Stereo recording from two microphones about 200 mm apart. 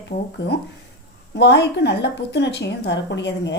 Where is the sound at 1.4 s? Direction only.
55° left (ahead or behind).